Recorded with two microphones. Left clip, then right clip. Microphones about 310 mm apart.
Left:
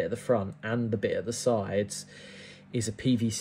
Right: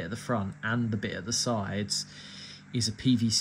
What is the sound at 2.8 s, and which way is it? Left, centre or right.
Speech, left.